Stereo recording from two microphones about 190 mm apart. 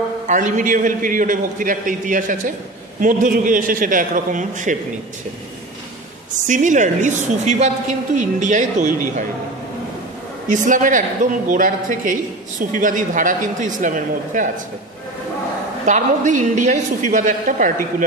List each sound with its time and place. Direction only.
0.3 s a woman's voice: 40° right (ahead or behind)
6.4 s a woman's voice: 40° right (ahead or behind)
10.5 s a woman's voice: 40° right (ahead or behind)
15.8 s a woman's voice: 40° right (ahead or behind)